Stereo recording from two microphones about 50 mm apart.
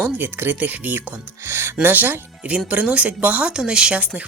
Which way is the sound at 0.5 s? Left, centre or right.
Right.